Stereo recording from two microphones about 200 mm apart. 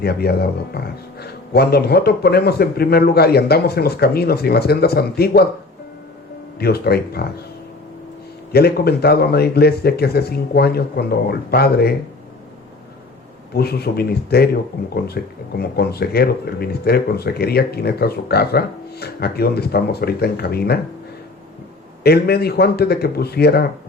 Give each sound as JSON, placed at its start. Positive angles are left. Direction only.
{"t": 0.0, "sound": "speech", "side_deg": 50}
{"t": 6.6, "sound": "speech", "side_deg": 50}
{"t": 8.5, "sound": "speech", "side_deg": 50}
{"t": 13.5, "sound": "speech", "side_deg": 50}
{"t": 22.0, "sound": "speech", "side_deg": 50}